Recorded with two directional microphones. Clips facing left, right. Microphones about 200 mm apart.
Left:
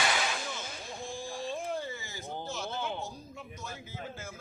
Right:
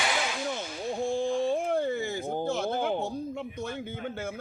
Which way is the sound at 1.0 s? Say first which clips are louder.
Right 12 dB; 65° right (ahead or behind).